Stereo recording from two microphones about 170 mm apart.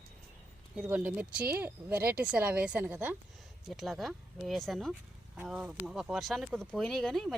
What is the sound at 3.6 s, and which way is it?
Speech, centre (ahead or behind).